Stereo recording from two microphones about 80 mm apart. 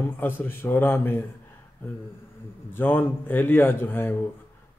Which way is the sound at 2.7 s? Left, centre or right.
Left.